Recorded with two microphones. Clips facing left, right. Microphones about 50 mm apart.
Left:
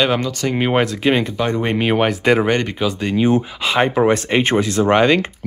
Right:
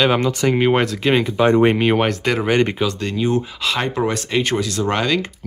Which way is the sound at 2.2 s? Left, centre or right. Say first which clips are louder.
Left 2 dB; centre.